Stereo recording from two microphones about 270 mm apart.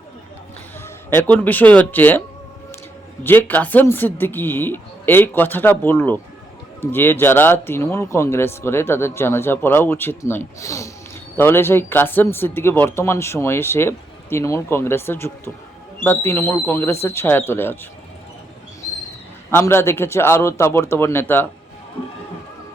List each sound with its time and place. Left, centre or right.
1.1 s speech: centre
3.2 s speech: centre
19.5 s speech: centre